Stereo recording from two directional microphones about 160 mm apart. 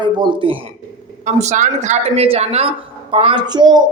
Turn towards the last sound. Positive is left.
turn(degrees=-25)  # may be behind; listen again after turning